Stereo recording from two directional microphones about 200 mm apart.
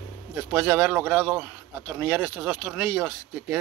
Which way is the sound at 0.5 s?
5° right (ahead or behind).